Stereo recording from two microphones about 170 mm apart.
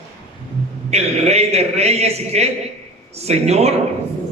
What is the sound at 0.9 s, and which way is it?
A man's voice, 40° right (ahead or behind).